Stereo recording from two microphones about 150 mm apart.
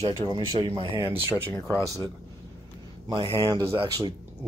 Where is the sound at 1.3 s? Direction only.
15° left (ahead or behind).